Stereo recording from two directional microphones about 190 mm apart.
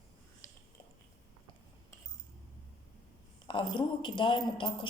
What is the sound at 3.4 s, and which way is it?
A man's voice, 25° left (ahead or behind).